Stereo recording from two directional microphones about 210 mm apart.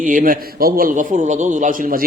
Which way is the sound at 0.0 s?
40° right (ahead or behind).